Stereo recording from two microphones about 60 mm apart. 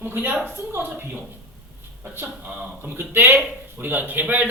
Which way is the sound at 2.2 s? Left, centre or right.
Right.